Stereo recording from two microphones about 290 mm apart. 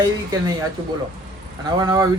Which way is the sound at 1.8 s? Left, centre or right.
Centre.